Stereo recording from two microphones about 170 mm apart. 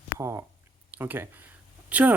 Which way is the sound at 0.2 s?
15° right (ahead or behind).